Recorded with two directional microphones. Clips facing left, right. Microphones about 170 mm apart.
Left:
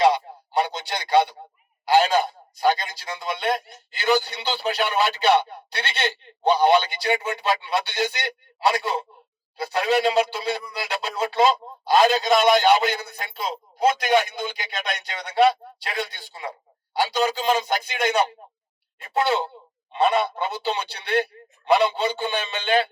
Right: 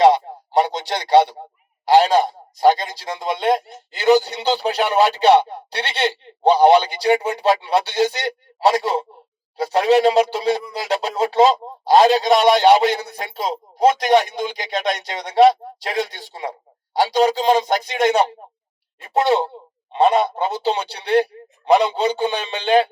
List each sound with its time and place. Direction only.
0.0 s radio: 40° right (ahead or behind)
1.8 s a man's voice: 35° right (ahead or behind)